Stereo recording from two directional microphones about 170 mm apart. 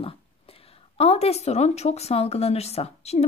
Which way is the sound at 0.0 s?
35° left (ahead or behind).